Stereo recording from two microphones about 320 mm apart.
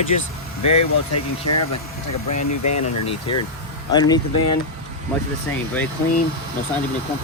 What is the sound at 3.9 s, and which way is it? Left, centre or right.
Speech, centre.